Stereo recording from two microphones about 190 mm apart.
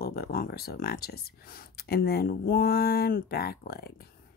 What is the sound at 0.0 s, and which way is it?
Speech, 55° left (ahead or behind).